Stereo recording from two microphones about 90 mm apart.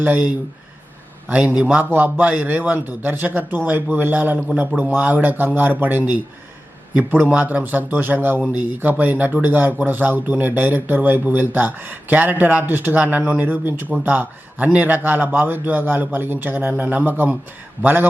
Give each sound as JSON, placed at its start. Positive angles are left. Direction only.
{"t": 0.0, "sound": "a man's voice", "side_deg": -20}